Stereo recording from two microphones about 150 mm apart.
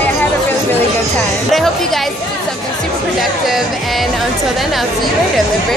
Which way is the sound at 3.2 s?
Centre (ahead or behind).